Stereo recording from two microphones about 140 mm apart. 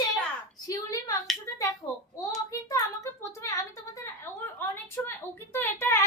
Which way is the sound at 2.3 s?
25° left (ahead or behind).